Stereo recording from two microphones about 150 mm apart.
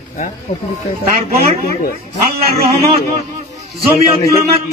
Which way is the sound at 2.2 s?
90° right.